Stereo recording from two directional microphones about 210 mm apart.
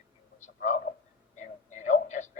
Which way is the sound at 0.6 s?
35° left (ahead or behind).